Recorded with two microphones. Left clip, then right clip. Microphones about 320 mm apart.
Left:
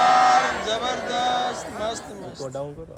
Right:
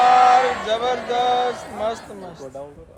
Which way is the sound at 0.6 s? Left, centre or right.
Right.